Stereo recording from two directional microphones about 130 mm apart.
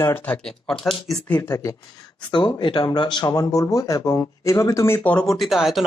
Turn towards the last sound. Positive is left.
turn(degrees=0)  # may be behind; listen again after turning